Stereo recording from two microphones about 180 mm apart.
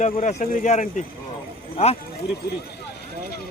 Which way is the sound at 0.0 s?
45° left (ahead or behind).